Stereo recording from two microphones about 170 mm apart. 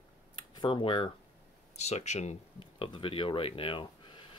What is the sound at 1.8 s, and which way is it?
Speech, 40° left (ahead or behind).